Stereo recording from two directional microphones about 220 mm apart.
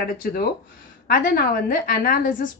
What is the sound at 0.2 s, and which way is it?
Speech, 45° left (ahead or behind).